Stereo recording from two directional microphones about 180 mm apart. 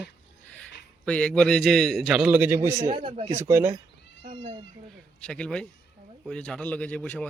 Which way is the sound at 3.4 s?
15° right (ahead or behind).